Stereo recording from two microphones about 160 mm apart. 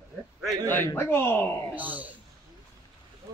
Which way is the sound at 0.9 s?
15° left (ahead or behind).